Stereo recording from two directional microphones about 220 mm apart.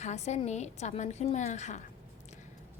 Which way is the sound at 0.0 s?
30° left (ahead or behind).